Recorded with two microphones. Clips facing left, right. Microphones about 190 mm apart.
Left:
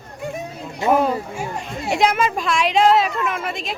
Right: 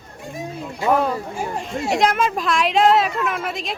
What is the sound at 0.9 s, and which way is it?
Speech, 15° left (ahead or behind).